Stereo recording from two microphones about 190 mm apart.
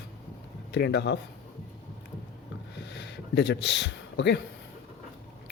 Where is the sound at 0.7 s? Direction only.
60° left (ahead or behind).